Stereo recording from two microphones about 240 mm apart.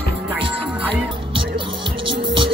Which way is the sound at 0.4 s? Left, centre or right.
Right.